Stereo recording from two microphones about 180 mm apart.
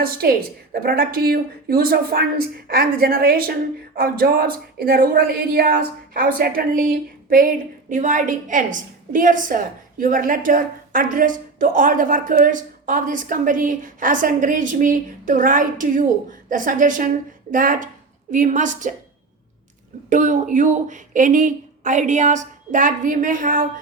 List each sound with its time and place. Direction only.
0.0 s a woman's voice: 55° right (ahead or behind)
20.1 s a woman's voice: 45° right (ahead or behind)